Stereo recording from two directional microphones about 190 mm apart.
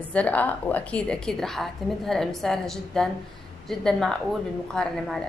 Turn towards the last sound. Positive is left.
turn(degrees=0)  # may be behind; listen again after turning